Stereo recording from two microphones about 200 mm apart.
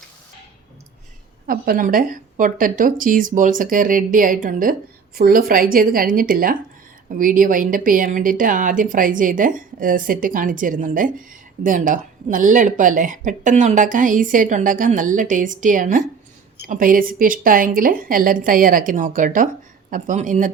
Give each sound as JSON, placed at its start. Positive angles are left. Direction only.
{"t": 1.5, "sound": "speech", "side_deg": -45}